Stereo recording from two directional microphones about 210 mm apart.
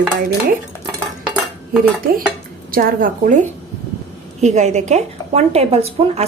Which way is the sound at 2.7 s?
40° right (ahead or behind).